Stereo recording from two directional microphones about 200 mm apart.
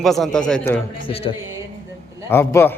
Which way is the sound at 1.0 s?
30° left (ahead or behind).